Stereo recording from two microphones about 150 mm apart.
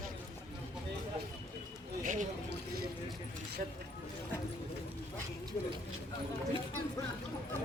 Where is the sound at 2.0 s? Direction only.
60° right (ahead or behind).